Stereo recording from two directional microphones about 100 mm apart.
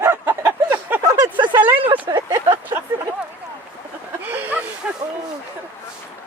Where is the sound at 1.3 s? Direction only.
50° right (ahead or behind).